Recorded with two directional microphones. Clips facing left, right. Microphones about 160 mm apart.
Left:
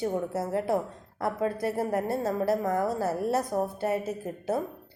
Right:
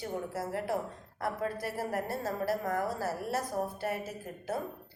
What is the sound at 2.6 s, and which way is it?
Speech, 35° left (ahead or behind).